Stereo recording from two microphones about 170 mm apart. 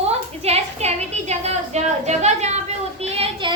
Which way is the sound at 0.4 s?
40° right (ahead or behind).